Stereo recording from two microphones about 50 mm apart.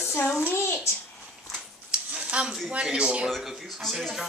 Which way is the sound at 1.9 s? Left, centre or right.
Right.